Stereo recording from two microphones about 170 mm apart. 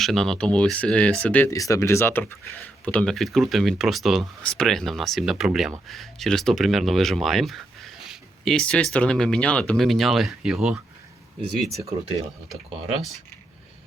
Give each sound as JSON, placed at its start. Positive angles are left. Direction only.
{"t": 0.0, "sound": "speech", "side_deg": 0}